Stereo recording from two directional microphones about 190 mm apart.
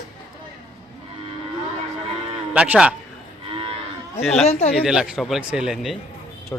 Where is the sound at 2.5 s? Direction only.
5° right (ahead or behind).